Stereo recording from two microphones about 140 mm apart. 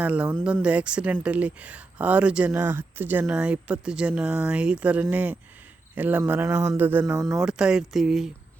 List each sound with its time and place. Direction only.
0.0 s speech: 10° right (ahead or behind)
7.3 s speech: 5° right (ahead or behind)